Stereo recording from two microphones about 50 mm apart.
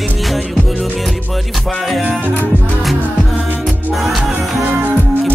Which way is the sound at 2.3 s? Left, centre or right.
Left.